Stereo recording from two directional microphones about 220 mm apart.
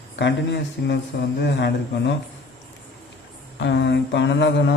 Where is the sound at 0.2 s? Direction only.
50° left (ahead or behind).